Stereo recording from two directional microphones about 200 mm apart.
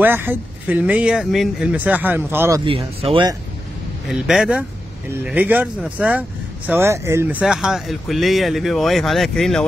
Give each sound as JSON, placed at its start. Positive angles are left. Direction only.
{"t": 0.0, "sound": "speech", "side_deg": -10}
{"t": 2.6, "sound": "speech", "side_deg": -25}
{"t": 4.1, "sound": "speech", "side_deg": -5}